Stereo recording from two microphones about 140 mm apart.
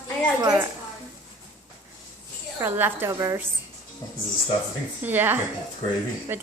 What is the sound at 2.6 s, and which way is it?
Speech, 15° right (ahead or behind).